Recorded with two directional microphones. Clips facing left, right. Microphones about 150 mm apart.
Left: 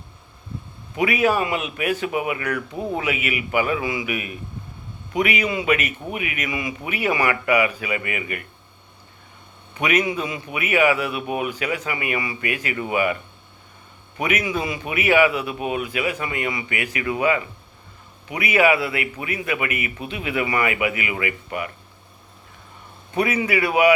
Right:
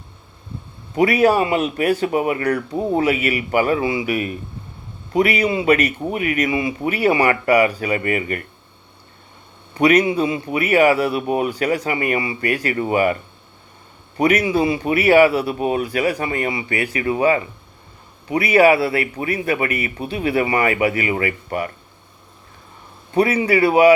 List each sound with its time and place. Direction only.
0.9 s speech: 35° right (ahead or behind)
9.7 s speech: 35° right (ahead or behind)
14.2 s speech: 35° right (ahead or behind)
23.1 s speech: 35° right (ahead or behind)